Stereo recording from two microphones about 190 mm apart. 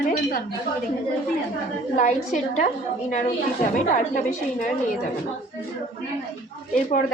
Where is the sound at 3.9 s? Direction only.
40° left (ahead or behind).